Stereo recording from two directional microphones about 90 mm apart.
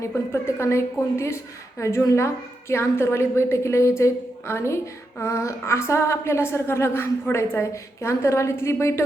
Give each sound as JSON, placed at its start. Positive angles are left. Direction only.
{"t": 0.0, "sound": "a woman's voice", "side_deg": 30}